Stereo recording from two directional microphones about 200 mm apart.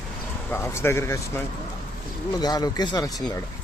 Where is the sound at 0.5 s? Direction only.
15° left (ahead or behind).